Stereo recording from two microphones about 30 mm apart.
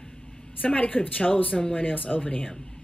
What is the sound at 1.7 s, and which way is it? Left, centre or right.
Speech, left.